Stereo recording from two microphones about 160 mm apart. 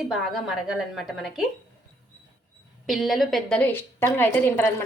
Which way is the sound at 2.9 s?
Centre (ahead or behind).